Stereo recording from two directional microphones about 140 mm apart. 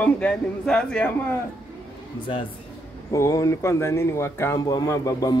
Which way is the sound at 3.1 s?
20° left (ahead or behind).